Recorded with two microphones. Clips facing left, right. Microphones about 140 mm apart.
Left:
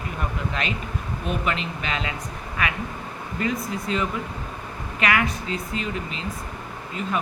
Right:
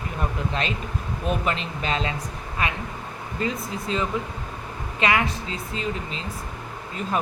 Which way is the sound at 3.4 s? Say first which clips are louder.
Left 1 dB; 25° right (ahead or behind).